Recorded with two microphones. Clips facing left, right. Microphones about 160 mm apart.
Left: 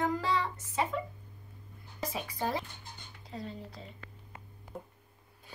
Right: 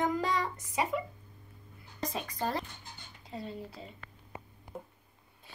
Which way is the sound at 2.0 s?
5° left (ahead or behind).